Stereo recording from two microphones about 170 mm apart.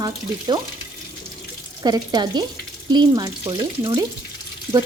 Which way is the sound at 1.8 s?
25° right (ahead or behind).